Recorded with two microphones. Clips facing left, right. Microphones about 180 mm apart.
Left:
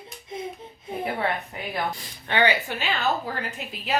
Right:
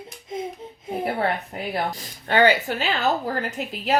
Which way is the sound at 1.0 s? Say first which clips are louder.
Right 3 dB; 35° right (ahead or behind).